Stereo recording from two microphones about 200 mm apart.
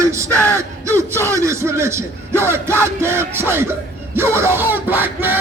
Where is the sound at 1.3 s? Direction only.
15° right (ahead or behind).